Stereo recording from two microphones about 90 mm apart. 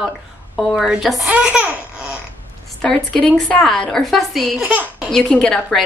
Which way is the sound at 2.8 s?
10° left (ahead or behind).